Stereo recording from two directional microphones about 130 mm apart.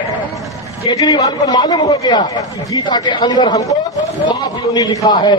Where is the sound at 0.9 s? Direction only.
30° left (ahead or behind).